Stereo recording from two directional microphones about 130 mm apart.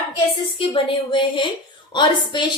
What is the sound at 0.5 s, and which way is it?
A woman's voice, 40° left (ahead or behind).